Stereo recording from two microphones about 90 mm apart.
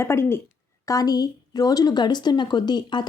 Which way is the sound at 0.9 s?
45° left (ahead or behind).